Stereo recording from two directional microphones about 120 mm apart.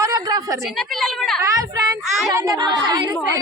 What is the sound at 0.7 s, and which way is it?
Speech, 5° left (ahead or behind).